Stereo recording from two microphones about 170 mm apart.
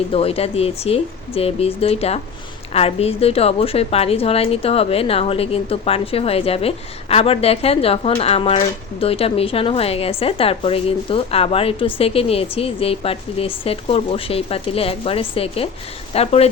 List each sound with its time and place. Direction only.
0.1 s speech: 35° left (ahead or behind)